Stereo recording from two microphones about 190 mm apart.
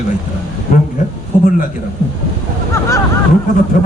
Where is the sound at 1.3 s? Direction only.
40° left (ahead or behind).